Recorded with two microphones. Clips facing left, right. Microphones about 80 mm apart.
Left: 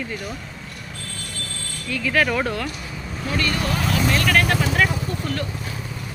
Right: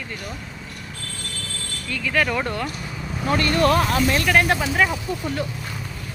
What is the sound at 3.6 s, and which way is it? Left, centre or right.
Speech, right.